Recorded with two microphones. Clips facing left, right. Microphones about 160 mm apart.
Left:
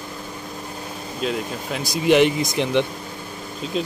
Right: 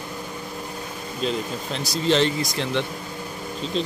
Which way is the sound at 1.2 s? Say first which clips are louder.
Left 1 dB; 5° left (ahead or behind).